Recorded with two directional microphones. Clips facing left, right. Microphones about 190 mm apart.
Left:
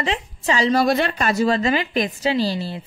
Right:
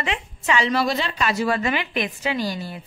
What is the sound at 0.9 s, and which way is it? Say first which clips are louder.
Speech: left 4 dB; 55° left (ahead or behind).